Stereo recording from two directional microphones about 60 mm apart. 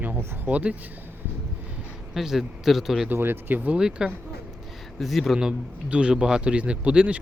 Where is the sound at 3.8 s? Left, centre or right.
Centre.